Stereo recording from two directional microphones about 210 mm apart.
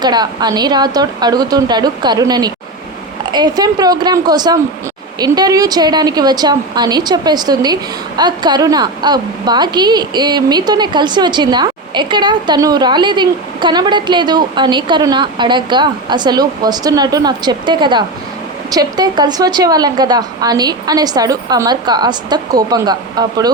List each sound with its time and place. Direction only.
0.0 s speech: 20° right (ahead or behind)